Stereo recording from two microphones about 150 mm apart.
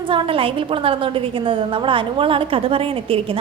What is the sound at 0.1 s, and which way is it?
A woman's voice, 35° right (ahead or behind).